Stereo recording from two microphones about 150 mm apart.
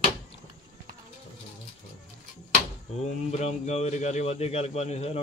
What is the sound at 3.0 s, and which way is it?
A man's voice, 50° left (ahead or behind).